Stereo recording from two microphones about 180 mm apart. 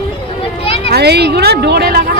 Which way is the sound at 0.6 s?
30° left (ahead or behind).